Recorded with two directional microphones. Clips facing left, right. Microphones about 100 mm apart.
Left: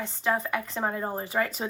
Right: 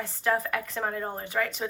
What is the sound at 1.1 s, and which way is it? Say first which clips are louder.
Speech: left 2 dB; 30° left (ahead or behind).